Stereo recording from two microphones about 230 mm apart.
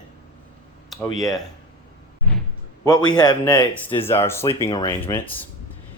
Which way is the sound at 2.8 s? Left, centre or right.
Centre.